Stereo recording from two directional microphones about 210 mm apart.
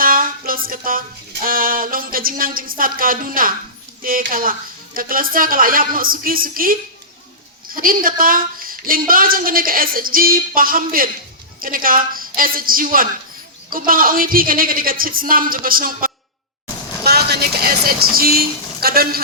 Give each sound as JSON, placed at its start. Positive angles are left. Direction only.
{"t": 0.0, "sound": "music", "side_deg": -40}
{"t": 1.5, "sound": "a woman's voice", "side_deg": -40}
{"t": 17.0, "sound": "a sound", "side_deg": -50}